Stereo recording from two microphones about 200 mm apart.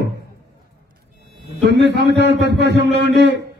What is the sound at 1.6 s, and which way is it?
A man's voice, 60° right (ahead or behind).